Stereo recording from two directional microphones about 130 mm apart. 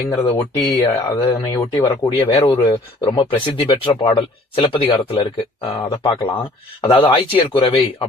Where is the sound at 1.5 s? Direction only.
25° left (ahead or behind).